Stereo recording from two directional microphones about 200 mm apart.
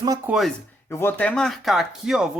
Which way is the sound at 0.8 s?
10° left (ahead or behind).